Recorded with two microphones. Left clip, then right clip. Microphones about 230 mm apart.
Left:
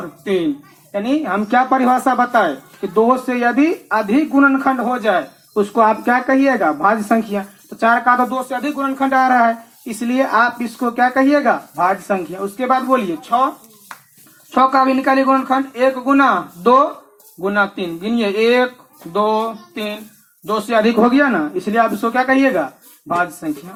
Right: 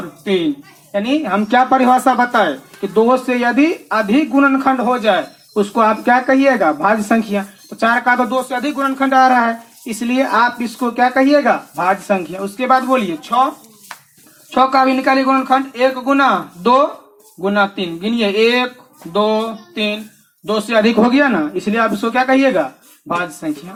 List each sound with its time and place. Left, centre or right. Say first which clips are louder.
0.9 s speech: right 2 dB; right
14.5 s speech: right 1 dB; right
17.4 s speech: right 1 dB; right